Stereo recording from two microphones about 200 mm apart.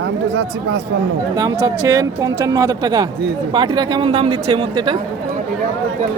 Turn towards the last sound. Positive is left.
turn(degrees=-25)  # may be behind; listen again after turning